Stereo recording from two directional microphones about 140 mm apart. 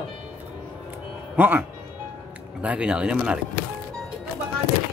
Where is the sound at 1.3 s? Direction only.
10° right (ahead or behind).